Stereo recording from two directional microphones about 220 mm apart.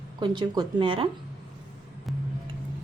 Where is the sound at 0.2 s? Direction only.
20° right (ahead or behind).